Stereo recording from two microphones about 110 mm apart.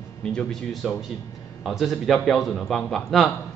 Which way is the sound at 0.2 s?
5° left (ahead or behind).